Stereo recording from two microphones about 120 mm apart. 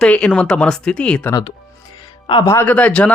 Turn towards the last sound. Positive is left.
turn(degrees=10)  # may be behind; listen again after turning